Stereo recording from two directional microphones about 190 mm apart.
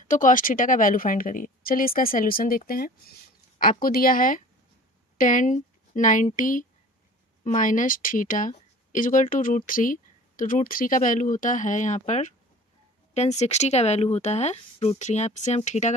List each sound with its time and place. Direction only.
0.1 s speech: 45° left (ahead or behind)